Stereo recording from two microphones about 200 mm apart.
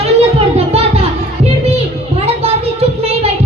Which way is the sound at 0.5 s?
30° right (ahead or behind).